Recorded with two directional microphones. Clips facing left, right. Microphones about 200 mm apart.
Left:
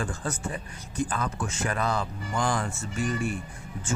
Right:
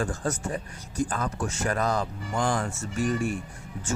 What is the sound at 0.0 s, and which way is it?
Speech, 45° right (ahead or behind).